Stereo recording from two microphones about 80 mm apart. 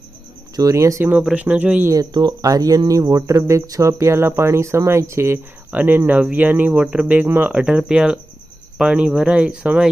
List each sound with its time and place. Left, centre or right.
0.5 s speech: right
1.4 s speech: centre
1.9 s speech: right
7.5 s speech: centre